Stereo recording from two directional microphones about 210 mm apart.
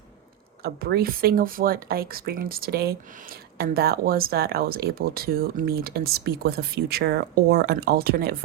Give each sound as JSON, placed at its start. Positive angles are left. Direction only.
{"t": 0.6, "sound": "speech", "side_deg": -50}